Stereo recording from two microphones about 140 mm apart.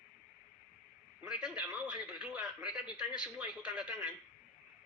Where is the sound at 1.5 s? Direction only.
10° right (ahead or behind).